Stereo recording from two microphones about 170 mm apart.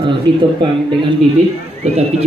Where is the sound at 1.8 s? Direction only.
40° right (ahead or behind).